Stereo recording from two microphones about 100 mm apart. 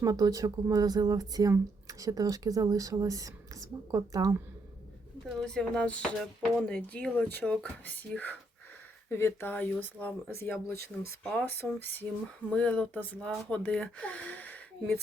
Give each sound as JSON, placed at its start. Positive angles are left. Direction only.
{"t": 0.0, "sound": "speech", "side_deg": -35}
{"t": 5.2, "sound": "speech", "side_deg": 5}
{"t": 11.2, "sound": "speech", "side_deg": 10}